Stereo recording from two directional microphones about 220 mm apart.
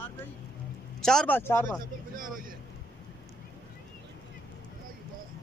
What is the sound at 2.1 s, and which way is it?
Speech, 40° right (ahead or behind).